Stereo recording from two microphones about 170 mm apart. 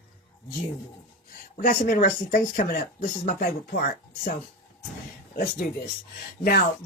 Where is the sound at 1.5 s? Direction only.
55° left (ahead or behind).